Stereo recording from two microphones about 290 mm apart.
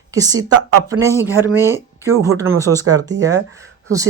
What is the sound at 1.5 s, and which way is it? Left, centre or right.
Speech, centre.